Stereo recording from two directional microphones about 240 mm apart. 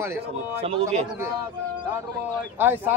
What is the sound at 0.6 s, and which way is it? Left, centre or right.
Speech, right.